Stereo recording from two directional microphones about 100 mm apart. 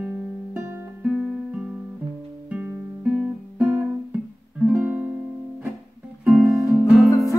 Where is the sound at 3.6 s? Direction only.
15° right (ahead or behind).